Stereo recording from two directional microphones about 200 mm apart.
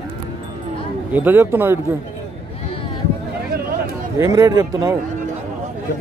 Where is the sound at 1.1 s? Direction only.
10° right (ahead or behind).